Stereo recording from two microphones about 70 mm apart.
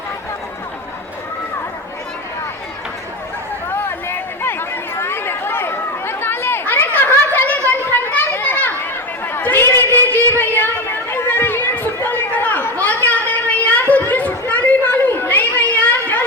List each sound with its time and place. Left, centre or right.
3.7 s chatter: left
7.7 s children playing: left
9.2 s a sound: left